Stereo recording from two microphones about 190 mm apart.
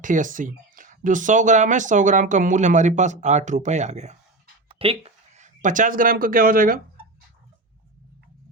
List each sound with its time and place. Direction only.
0.0 s speech: 45° right (ahead or behind)